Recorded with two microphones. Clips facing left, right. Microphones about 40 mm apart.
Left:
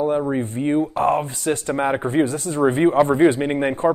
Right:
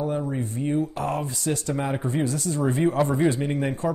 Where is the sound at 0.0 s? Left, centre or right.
Left.